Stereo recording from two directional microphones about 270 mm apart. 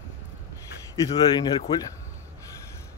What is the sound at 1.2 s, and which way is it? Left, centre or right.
Speech, centre.